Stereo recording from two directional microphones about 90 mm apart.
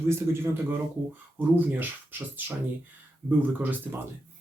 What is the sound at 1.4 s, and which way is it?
Speech, 20° right (ahead or behind).